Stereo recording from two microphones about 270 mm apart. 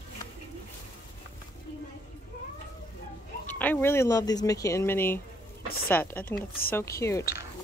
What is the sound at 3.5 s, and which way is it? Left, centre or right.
A woman's voice, centre.